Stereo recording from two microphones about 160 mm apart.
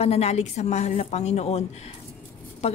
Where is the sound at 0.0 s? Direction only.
40° left (ahead or behind).